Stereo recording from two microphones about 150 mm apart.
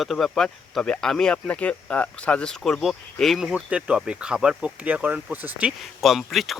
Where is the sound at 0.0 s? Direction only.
Centre (ahead or behind).